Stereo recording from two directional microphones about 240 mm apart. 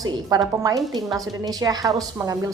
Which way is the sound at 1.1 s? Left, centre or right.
Centre.